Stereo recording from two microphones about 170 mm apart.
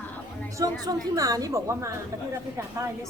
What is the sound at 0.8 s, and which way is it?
A woman's voice, 20° right (ahead or behind).